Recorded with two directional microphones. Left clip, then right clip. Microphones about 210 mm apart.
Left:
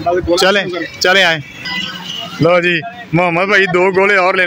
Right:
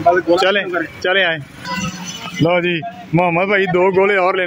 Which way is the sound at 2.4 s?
5° left (ahead or behind).